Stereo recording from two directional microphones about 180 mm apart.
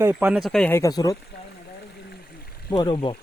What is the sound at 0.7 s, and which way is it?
Speech, 20° left (ahead or behind).